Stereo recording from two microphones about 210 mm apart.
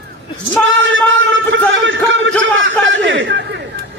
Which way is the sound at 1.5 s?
60° right (ahead or behind).